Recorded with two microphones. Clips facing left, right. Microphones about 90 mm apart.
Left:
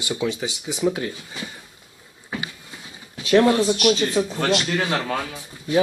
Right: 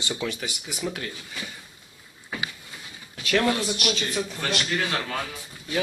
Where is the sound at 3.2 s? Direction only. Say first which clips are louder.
Left 7 dB; 25° left (ahead or behind).